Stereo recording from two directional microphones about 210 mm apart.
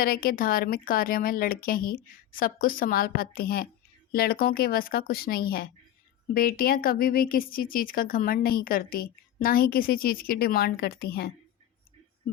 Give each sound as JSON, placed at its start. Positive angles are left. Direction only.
{"t": 0.0, "sound": "speech", "side_deg": 45}